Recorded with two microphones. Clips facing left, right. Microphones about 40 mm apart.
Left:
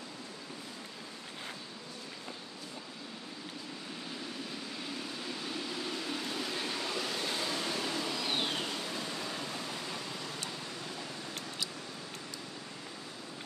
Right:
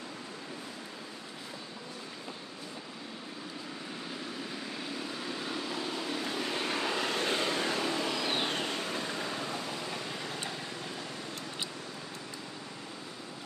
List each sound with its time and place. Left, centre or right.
6.5 s vehicle: right
7.5 s vehicle: right